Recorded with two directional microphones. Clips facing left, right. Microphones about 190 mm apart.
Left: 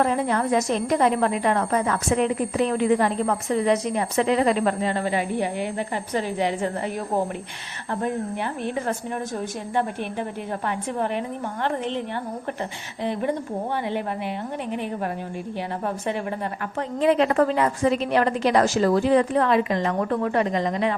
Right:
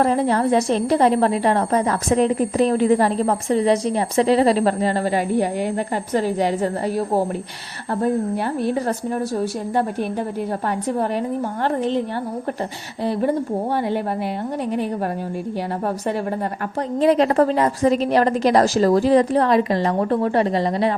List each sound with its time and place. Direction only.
0.0 s a woman's voice: 35° right (ahead or behind)
8.6 s a woman's voice: 40° right (ahead or behind)
11.6 s a woman's voice: 40° right (ahead or behind)
17.0 s a woman's voice: 35° right (ahead or behind)